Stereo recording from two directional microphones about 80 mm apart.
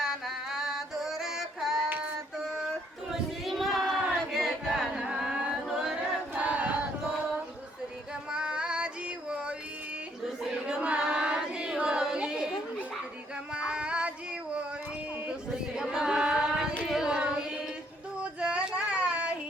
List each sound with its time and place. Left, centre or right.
0.0 s music: centre
2.0 s child singing: centre
3.1 s choir: centre
5.0 s carnatic music: centre
6.3 s choir: centre
8.3 s music: centre
10.4 s choir: centre
13.5 s a sound: centre
15.3 s chant: centre
16.9 s carnatic music: centre
18.2 s child singing: centre